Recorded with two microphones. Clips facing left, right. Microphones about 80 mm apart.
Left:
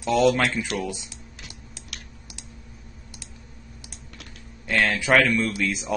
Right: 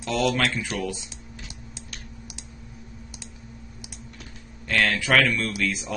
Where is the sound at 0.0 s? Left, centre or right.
Centre.